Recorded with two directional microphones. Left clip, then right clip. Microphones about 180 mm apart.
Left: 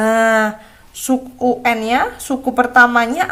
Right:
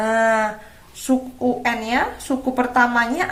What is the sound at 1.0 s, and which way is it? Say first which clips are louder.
A woman's voice: left 4 dB; 35° left (ahead or behind).